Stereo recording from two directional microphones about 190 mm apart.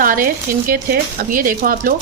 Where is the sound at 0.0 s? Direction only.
45° right (ahead or behind).